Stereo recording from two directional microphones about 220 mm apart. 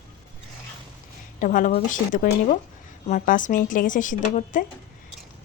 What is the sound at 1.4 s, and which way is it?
A woman's voice, 35° left (ahead or behind).